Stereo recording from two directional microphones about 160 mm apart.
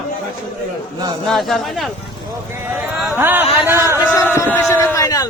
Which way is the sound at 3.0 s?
10° right (ahead or behind).